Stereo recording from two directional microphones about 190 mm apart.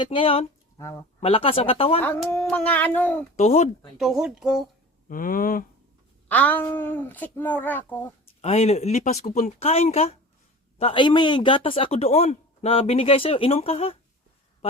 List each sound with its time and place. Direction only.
0.0 s speech: 30° left (ahead or behind)
0.8 s speech: 15° left (ahead or behind)
1.2 s speech: 30° left (ahead or behind)
2.0 s speech: 5° left (ahead or behind)
3.3 s speech: 35° left (ahead or behind)
3.9 s speech: centre (ahead or behind)
5.0 s speech: 45° left (ahead or behind)
6.2 s speech: 10° left (ahead or behind)
8.4 s speech: 35° left (ahead or behind)